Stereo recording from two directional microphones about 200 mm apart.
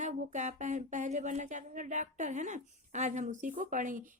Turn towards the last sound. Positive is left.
turn(degrees=-40)  # may be behind; listen again after turning